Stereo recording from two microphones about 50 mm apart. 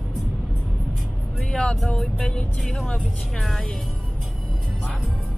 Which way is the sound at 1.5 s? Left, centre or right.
Centre.